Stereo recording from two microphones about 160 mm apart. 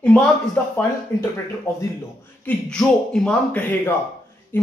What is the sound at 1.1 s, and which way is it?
Speech, 15° left (ahead or behind).